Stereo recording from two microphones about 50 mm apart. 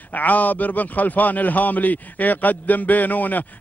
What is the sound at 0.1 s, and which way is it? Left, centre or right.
A man's voice, left.